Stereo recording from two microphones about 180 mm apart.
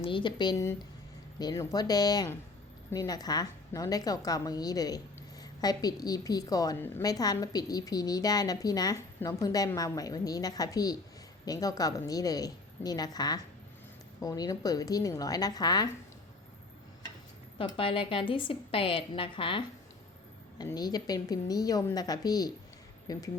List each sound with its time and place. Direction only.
0.0 s a woman's voice: 25° left (ahead or behind)
17.6 s a woman's voice: 30° left (ahead or behind)